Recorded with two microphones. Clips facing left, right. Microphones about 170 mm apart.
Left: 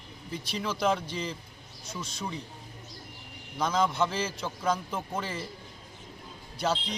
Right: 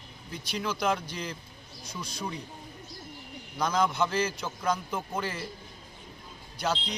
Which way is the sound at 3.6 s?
Centre (ahead or behind).